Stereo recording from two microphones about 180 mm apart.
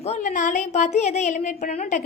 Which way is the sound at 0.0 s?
40° left (ahead or behind).